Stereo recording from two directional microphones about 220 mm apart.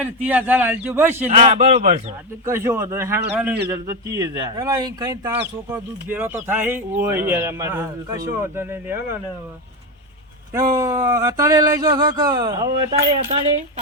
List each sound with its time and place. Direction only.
0.0 s speech: 5° right (ahead or behind)
1.3 s a man's voice: 30° right (ahead or behind)
2.5 s speech: 10° right (ahead or behind)
10.8 s speech: 15° right (ahead or behind)